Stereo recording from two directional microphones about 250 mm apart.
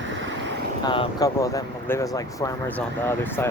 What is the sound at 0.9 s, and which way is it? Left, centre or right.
Speech, centre.